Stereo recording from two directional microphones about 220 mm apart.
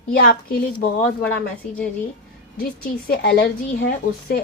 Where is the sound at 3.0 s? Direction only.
45° left (ahead or behind).